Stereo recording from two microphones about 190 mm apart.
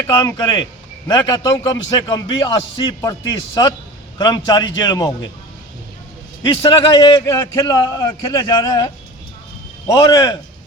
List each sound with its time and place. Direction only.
0.1 s a man's voice: 20° left (ahead or behind)
6.4 s a man's voice: 25° left (ahead or behind)
9.9 s a man's voice: 20° left (ahead or behind)